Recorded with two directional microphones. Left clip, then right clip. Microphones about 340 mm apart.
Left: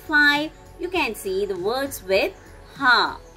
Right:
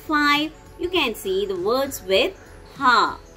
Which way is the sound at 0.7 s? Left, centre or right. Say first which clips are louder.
Right 2 dB; centre.